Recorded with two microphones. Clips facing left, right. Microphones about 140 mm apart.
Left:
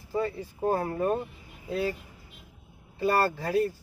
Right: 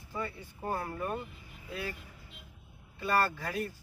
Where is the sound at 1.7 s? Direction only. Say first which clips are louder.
Left 10 dB; 25° left (ahead or behind).